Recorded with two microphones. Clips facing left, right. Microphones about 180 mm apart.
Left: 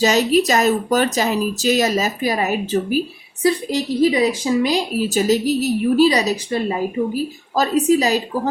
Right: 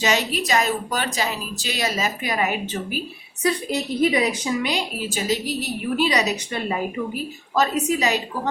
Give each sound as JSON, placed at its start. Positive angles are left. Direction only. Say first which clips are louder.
{"t": 0.0, "sound": "a woman's voice", "louder": "left 8 dB", "side_deg": 40}
{"t": 3.4, "sound": "a woman's voice", "louder": "left 5 dB", "side_deg": 30}